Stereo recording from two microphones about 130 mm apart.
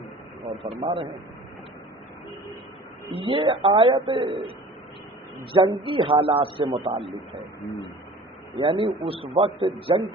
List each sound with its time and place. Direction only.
0.6 s a man's voice: 45° right (ahead or behind)
3.1 s a man's voice: 45° right (ahead or behind)
5.5 s a man's voice: 40° right (ahead or behind)
8.5 s a man's voice: 40° right (ahead or behind)